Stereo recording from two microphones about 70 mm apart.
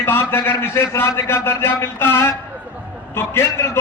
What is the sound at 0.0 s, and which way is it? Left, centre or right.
A man's voice, left.